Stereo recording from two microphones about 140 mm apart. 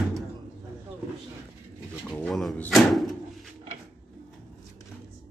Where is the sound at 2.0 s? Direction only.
5° left (ahead or behind).